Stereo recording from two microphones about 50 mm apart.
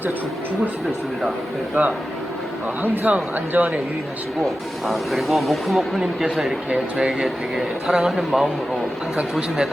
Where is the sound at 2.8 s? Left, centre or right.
Right.